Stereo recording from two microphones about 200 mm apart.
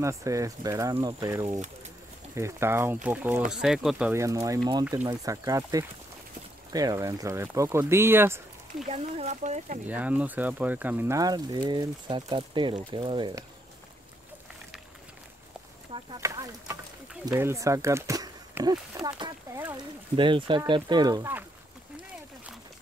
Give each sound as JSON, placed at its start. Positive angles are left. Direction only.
{"t": 0.0, "sound": "speech", "side_deg": -15}
{"t": 4.1, "sound": "speech", "side_deg": -15}
{"t": 8.8, "sound": "speech", "side_deg": -35}
{"t": 9.8, "sound": "speech", "side_deg": -5}
{"t": 15.9, "sound": "a sound", "side_deg": -20}
{"t": 17.1, "sound": "speech", "side_deg": -10}